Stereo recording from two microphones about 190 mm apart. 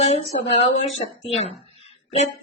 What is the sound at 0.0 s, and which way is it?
Speech, 35° left (ahead or behind).